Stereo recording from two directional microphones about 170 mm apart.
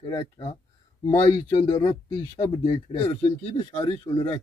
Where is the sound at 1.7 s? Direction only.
20° left (ahead or behind).